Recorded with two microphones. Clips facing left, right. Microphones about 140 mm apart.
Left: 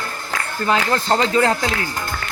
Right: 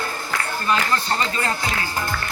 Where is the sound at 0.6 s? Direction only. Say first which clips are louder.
Left 4 dB; 90° left.